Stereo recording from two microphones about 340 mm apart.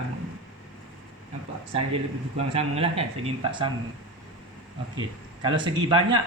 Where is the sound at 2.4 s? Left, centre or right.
Centre.